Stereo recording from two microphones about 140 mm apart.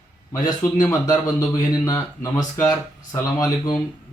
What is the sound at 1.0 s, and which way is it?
Speech, 25° left (ahead or behind).